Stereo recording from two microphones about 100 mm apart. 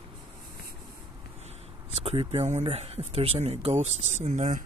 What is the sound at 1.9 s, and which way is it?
Speech, 90° right.